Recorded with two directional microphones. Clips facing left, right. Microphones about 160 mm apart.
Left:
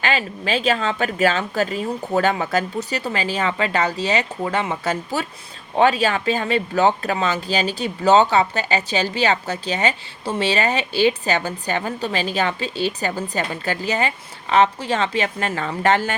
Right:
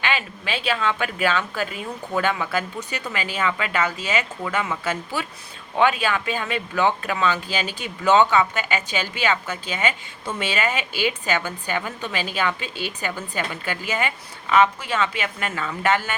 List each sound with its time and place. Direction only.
0.0 s speech: 40° left (ahead or behind)